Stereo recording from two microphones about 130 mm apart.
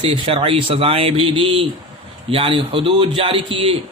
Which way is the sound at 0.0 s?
45° right (ahead or behind).